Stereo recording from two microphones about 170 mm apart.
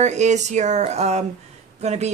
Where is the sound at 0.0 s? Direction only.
45° right (ahead or behind).